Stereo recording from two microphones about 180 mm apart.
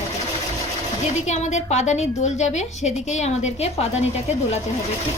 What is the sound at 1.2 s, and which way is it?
A woman's voice, 40° left (ahead or behind).